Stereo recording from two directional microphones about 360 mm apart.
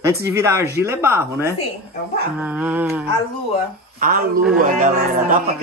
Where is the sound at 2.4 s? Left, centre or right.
Centre.